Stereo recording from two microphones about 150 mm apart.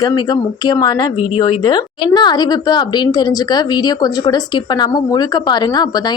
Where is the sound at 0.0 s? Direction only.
25° left (ahead or behind).